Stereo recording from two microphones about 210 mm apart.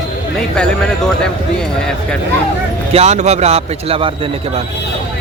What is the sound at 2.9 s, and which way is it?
Speech, 30° right (ahead or behind).